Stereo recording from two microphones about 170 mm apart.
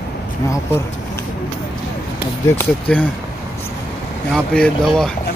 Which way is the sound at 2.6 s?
10° left (ahead or behind).